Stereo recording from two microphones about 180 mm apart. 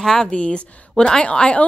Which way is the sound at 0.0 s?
5° left (ahead or behind).